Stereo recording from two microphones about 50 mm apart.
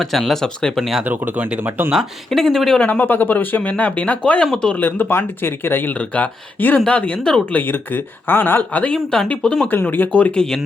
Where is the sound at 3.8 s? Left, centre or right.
Left.